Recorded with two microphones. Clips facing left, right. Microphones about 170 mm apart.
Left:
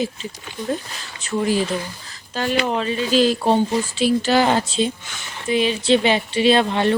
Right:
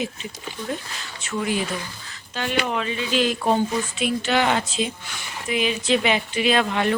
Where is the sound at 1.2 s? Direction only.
35° left (ahead or behind).